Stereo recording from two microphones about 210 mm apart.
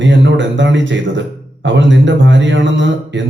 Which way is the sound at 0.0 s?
60° right (ahead or behind).